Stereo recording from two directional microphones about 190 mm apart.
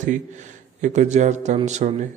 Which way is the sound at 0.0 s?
40° right (ahead or behind).